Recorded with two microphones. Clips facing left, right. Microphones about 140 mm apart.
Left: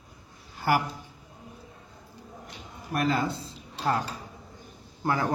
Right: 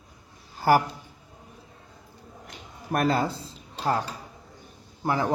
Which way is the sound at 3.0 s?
35° right (ahead or behind).